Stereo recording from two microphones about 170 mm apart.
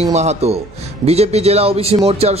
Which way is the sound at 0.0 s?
40° right (ahead or behind).